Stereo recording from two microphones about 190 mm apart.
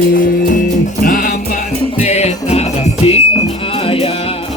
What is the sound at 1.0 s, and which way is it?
Music, 45° left (ahead or behind).